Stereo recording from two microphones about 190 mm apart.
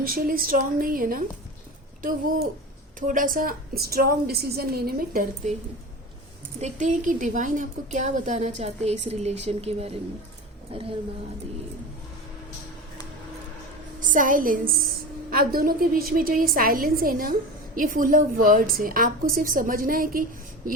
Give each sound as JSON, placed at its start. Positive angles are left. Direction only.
{"t": 0.0, "sound": "a woman's voice", "side_deg": -50}
{"t": 6.6, "sound": "a woman's voice", "side_deg": -40}
{"t": 14.0, "sound": "a woman's voice", "side_deg": -45}